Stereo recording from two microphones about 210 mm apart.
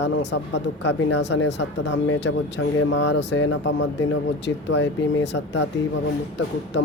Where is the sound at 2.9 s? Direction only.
55° left (ahead or behind).